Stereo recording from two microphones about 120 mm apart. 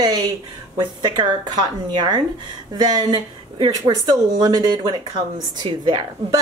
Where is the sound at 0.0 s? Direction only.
35° right (ahead or behind).